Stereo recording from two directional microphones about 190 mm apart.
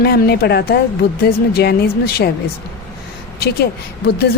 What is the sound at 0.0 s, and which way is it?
A woman's voice, 55° left (ahead or behind).